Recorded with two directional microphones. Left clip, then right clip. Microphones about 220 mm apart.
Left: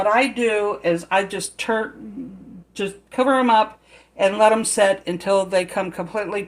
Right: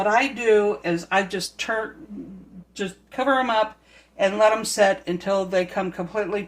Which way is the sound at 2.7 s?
40° left (ahead or behind).